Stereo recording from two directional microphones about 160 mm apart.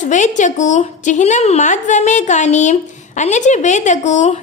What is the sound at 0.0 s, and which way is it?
A woman's voice, 50° left (ahead or behind).